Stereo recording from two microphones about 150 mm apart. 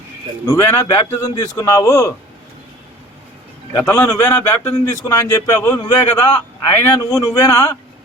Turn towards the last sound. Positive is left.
turn(degrees=20)  # may be behind; listen again after turning